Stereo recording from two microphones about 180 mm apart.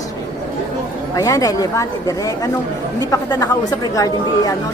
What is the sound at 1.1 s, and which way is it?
Speech, 20° left (ahead or behind).